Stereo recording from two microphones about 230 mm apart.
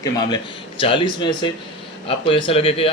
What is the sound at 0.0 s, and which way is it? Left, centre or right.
A man's voice, centre.